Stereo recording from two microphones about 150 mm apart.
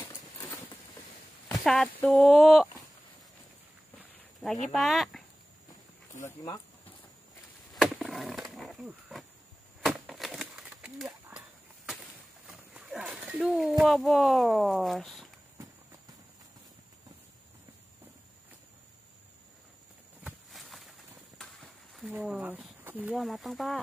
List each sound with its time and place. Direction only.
0.1 s a sound: 20° left (ahead or behind)
1.6 s speech: 5° left (ahead or behind)
4.7 s speech: centre (ahead or behind)
6.1 s speech: 20° left (ahead or behind)
7.7 s a sound: centre (ahead or behind)
12.4 s speech: 5° right (ahead or behind)
20.5 s a sound: centre (ahead or behind)
22.0 s speech: 10° right (ahead or behind)
23.1 s speech: centre (ahead or behind)